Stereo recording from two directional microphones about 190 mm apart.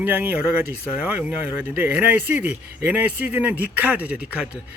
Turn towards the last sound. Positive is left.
turn(degrees=-5)  # may be behind; listen again after turning